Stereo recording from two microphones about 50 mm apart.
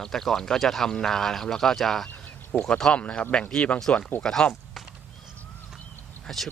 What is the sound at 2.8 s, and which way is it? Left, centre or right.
Speech, centre.